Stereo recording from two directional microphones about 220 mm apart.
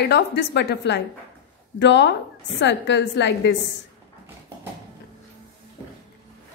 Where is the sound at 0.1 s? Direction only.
50° left (ahead or behind).